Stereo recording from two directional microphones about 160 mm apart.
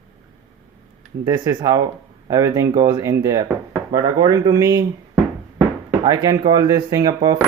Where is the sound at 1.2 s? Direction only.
20° right (ahead or behind).